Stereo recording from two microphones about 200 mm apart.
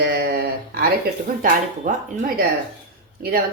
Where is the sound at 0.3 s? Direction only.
50° right (ahead or behind).